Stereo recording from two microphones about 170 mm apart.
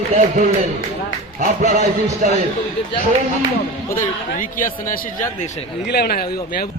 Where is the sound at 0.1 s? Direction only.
45° right (ahead or behind).